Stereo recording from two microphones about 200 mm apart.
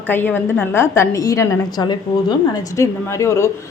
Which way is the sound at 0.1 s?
10° left (ahead or behind).